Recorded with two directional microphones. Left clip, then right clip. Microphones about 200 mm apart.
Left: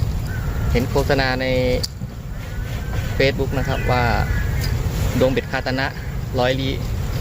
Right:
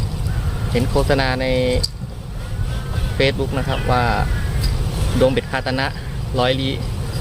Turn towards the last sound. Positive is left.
turn(degrees=0)  # may be behind; listen again after turning